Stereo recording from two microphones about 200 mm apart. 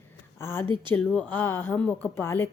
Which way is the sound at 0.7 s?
25° right (ahead or behind).